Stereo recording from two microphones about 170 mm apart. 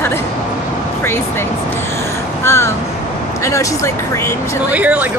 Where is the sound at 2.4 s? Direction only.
15° left (ahead or behind).